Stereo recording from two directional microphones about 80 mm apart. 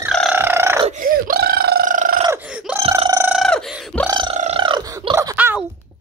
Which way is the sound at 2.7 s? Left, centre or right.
Right.